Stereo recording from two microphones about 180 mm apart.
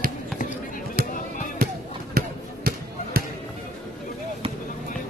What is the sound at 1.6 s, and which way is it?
Basketball bounce, 55° right (ahead or behind).